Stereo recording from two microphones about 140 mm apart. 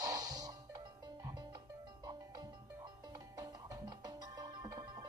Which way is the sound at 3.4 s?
25° right (ahead or behind).